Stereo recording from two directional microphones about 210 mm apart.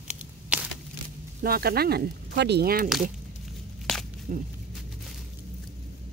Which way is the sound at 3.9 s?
Centre (ahead or behind).